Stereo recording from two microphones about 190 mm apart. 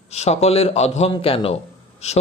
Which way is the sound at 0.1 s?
35° left (ahead or behind).